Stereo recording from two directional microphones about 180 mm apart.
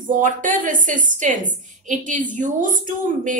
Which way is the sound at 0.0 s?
45° right (ahead or behind).